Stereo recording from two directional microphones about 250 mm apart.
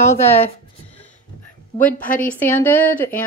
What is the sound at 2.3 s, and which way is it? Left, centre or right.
Speech, centre.